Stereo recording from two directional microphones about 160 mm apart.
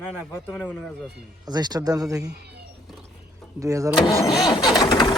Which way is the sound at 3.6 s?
20° right (ahead or behind).